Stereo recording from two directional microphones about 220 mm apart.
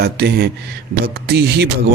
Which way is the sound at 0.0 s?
50° right (ahead or behind).